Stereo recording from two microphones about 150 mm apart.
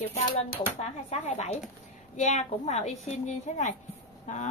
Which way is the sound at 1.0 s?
45° left (ahead or behind).